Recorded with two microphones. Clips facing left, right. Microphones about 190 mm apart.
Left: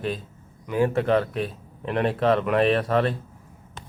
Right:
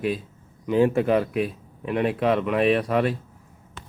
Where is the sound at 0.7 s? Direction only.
20° right (ahead or behind).